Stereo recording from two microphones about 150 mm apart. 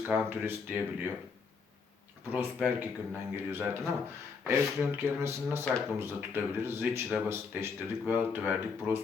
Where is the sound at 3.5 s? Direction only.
15° right (ahead or behind).